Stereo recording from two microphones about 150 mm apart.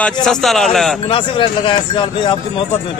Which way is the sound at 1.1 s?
35° left (ahead or behind).